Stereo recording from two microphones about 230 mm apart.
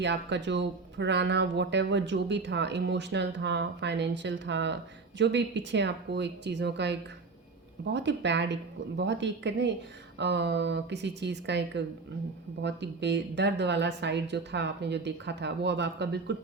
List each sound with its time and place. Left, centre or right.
0.0 s speech: right
7.9 s speech: right